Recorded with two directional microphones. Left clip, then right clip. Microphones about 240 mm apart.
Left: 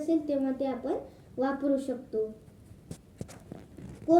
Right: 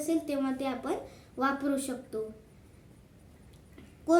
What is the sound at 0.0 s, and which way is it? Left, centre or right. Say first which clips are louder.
Speech: left 2 dB; centre.